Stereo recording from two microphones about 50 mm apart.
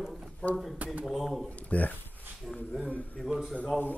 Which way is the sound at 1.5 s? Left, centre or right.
Left.